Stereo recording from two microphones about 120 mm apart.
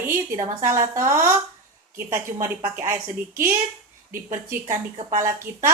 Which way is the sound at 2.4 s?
20° right (ahead or behind).